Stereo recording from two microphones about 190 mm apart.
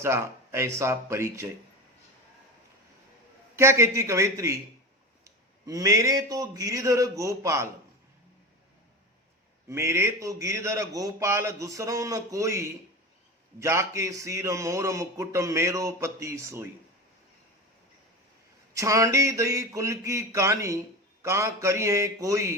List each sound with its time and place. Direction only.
0.0 s a man's voice: 15° right (ahead or behind)
3.5 s a man's voice: 15° right (ahead or behind)
9.6 s a man's voice: 15° right (ahead or behind)
18.7 s a man's voice: 15° right (ahead or behind)